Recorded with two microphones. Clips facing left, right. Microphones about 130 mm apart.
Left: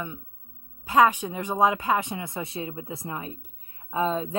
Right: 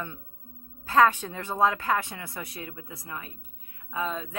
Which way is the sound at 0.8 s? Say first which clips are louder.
Left 1 dB; 15° left (ahead or behind).